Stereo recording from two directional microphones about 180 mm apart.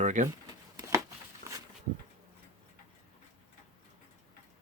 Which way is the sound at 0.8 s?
15° right (ahead or behind).